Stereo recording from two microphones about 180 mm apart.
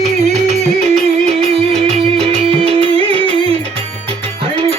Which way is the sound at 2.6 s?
30° right (ahead or behind).